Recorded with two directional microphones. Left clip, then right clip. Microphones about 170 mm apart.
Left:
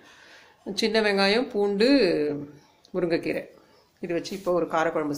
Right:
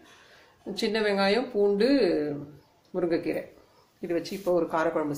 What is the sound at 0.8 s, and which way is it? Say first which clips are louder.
Speech: left 3 dB; 25° left (ahead or behind).